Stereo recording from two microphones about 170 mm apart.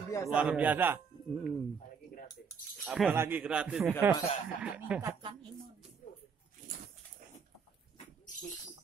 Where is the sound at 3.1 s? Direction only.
10° right (ahead or behind).